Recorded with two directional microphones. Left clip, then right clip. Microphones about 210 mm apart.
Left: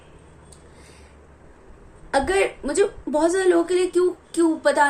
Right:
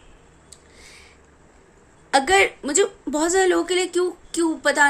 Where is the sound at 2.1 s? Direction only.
35° right (ahead or behind).